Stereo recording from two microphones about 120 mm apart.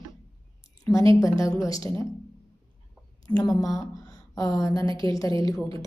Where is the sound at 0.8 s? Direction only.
25° left (ahead or behind).